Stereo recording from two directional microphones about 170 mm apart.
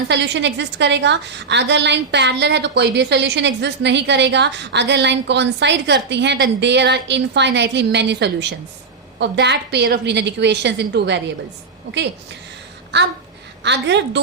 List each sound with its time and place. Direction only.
0.1 s a woman's voice: 90° right
12.9 s a woman's voice: 90° right